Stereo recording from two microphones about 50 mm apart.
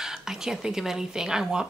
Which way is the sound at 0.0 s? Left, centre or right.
Centre.